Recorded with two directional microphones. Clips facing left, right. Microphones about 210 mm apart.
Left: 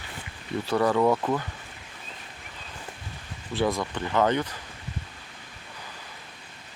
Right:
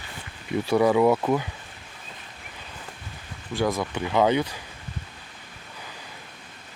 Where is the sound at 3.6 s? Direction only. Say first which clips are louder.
Right 1 dB; centre (ahead or behind).